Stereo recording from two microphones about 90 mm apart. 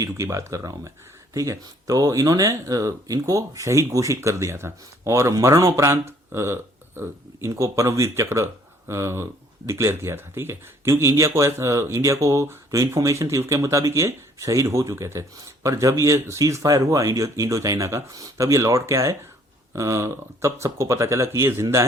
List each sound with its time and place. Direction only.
0.0 s speech: 35° right (ahead or behind)